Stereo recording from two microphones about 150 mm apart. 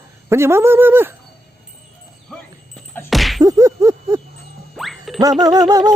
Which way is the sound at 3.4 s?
20° right (ahead or behind).